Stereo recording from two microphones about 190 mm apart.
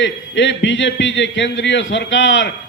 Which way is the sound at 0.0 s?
70° left (ahead or behind).